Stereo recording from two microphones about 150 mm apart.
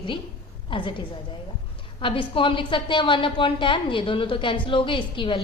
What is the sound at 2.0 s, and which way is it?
A woman's voice, 35° left (ahead or behind).